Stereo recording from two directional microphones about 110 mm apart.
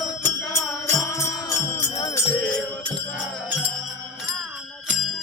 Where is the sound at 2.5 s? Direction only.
10° left (ahead or behind).